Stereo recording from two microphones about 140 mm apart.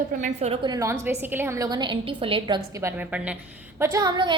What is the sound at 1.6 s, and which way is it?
Speech, 30° right (ahead or behind).